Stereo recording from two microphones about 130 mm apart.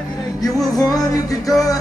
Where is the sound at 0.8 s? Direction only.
25° left (ahead or behind).